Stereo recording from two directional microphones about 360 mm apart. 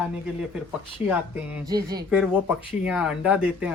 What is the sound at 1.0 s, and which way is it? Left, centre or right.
Speech, centre.